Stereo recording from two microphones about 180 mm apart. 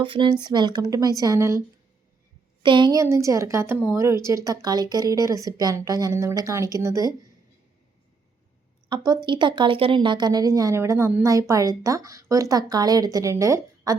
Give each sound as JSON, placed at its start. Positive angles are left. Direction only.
{"t": 0.0, "sound": "a woman's voice", "side_deg": -30}
{"t": 2.6, "sound": "a woman's voice", "side_deg": -25}
{"t": 8.9, "sound": "a woman's voice", "side_deg": -25}